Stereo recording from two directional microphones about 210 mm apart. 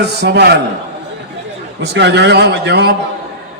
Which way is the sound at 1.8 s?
55° right (ahead or behind).